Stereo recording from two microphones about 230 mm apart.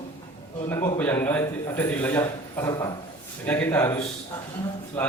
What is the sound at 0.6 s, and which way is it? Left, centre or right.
A man's voice, centre.